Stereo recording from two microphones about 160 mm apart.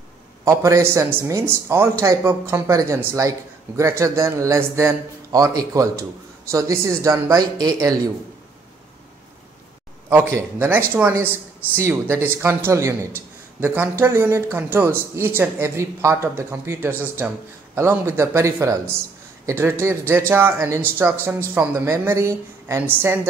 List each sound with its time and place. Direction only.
0.5 s speech: 20° right (ahead or behind)
10.3 s speech: 15° right (ahead or behind)